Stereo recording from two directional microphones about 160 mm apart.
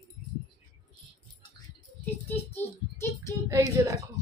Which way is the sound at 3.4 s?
20° right (ahead or behind).